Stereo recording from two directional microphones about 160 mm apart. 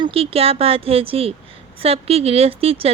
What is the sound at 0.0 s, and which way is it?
A woman's voice, 35° right (ahead or behind).